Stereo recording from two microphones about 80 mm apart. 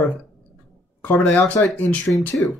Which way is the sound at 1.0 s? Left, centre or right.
Left.